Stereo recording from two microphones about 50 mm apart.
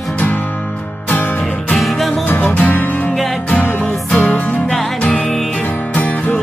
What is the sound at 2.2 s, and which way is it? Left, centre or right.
Music, left.